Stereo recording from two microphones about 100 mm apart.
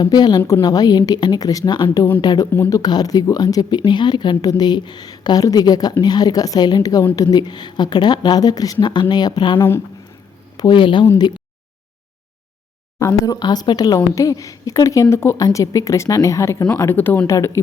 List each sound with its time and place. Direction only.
0.0 s speech: 45° left (ahead or behind)
2.5 s speech: 30° left (ahead or behind); by 9.6 s 45° left (ahead or behind)
9.6 s speech: 25° left (ahead or behind)
10.6 s speech: 55° left (ahead or behind)
13.0 s speech: 30° left (ahead or behind)
13.3 s speech: 40° left (ahead or behind)